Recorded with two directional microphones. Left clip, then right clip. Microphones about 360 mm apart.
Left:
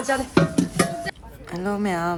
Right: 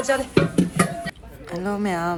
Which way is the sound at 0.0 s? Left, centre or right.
Centre.